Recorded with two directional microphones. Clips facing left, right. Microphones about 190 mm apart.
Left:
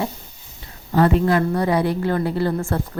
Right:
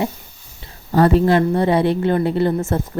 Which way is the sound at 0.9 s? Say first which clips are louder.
Right 3 dB; 35° right (ahead or behind).